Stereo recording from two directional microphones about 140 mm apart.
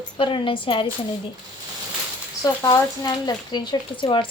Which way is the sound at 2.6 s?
25° left (ahead or behind).